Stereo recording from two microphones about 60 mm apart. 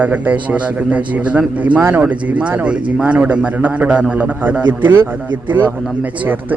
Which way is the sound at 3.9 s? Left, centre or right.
Centre.